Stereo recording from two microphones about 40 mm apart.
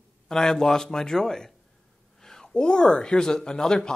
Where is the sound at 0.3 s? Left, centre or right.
Centre.